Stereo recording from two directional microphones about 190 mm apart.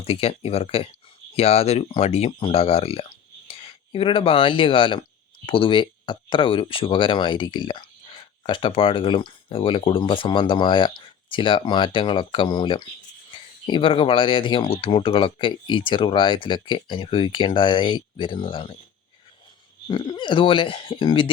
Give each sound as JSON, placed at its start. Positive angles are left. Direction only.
{"t": 0.0, "sound": "speech", "side_deg": 30}
{"t": 19.9, "sound": "speech", "side_deg": 25}